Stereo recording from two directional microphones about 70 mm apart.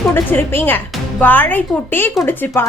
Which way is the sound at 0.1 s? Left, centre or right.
Left.